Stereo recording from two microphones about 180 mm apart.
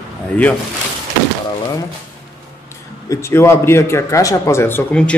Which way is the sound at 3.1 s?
15° left (ahead or behind).